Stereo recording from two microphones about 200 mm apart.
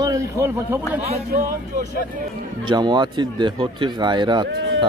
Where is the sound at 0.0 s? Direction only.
15° right (ahead or behind).